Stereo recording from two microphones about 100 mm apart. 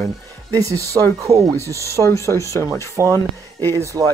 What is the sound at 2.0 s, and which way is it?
Speech, 30° left (ahead or behind).